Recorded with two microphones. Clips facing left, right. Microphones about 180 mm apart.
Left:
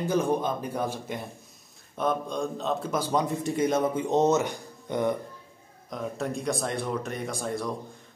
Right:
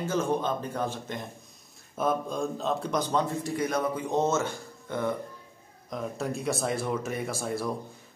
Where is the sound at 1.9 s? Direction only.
5° right (ahead or behind); by 5.1 s 15° left (ahead or behind).